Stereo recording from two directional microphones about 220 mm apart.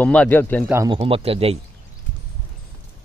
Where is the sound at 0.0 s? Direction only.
5° left (ahead or behind).